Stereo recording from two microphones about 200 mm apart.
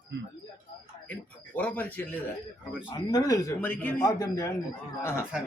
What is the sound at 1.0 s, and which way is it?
Speech, 10° left (ahead or behind).